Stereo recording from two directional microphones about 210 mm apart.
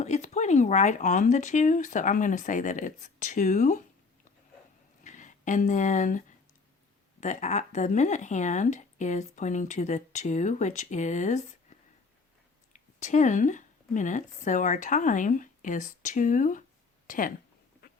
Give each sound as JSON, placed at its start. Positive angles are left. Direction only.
{"t": 0.0, "sound": "speech", "side_deg": 35}
{"t": 5.0, "sound": "speech", "side_deg": 35}
{"t": 12.7, "sound": "speech", "side_deg": 35}